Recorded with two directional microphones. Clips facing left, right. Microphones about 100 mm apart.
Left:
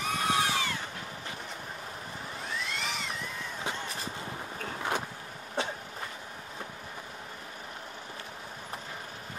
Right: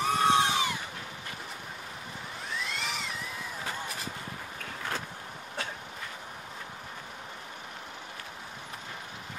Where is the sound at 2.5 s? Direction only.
Centre (ahead or behind).